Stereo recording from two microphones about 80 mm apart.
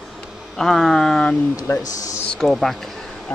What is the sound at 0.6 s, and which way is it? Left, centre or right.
Speech, centre.